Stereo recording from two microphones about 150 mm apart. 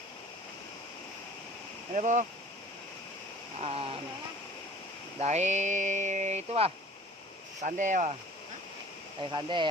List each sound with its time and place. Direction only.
1.9 s speech: 55° right (ahead or behind)
3.6 s speech: 40° right (ahead or behind)
5.2 s speech: 50° right (ahead or behind)
9.3 s speech: 30° right (ahead or behind)